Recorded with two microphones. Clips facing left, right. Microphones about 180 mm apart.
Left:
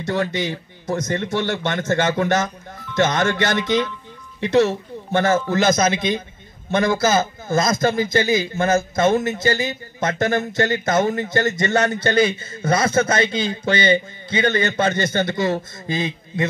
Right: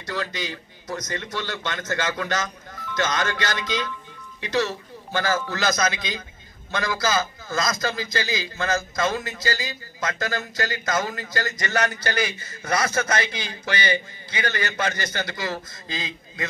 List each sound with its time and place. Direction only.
0.0 s speech: 25° left (ahead or behind)